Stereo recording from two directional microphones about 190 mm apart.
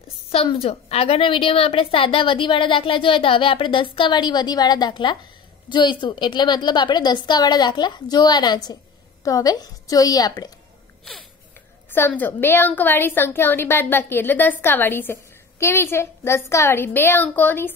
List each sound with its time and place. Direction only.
0.3 s a woman's voice: 30° left (ahead or behind)
11.9 s a woman's voice: 10° left (ahead or behind)